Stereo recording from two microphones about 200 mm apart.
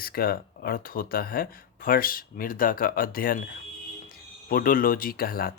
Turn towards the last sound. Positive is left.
turn(degrees=50)  # may be behind; listen again after turning